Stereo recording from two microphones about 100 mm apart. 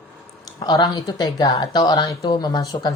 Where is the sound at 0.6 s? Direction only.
45° left (ahead or behind).